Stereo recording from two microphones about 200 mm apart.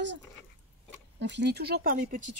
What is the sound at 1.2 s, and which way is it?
Speech, 60° right (ahead or behind).